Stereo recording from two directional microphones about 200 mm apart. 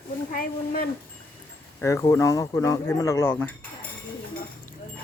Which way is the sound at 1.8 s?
15° left (ahead or behind).